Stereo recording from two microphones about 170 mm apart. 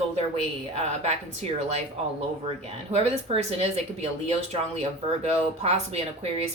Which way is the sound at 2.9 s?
35° right (ahead or behind).